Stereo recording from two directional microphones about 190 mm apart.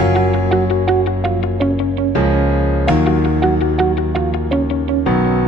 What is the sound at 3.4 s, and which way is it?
Music, centre (ahead or behind).